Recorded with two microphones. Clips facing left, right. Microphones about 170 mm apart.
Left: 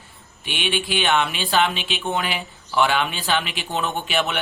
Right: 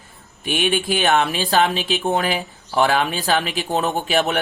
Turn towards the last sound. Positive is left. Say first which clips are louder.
# right 4 dB
turn(degrees=-40)  # may be behind; listen again after turning